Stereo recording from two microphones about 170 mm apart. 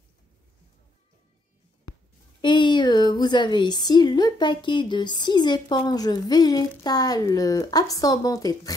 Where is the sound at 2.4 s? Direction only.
25° left (ahead or behind).